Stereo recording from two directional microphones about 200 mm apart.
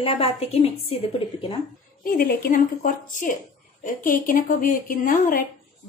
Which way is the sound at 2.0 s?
45° left (ahead or behind).